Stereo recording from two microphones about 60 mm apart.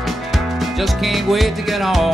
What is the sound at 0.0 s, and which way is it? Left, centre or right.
Music, centre.